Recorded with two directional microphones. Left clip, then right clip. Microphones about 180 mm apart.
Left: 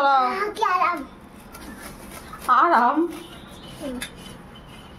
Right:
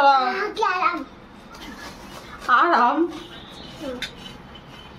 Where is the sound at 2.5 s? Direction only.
30° left (ahead or behind).